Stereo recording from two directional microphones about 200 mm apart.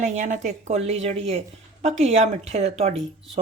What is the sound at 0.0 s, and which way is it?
A woman's voice, 35° right (ahead or behind).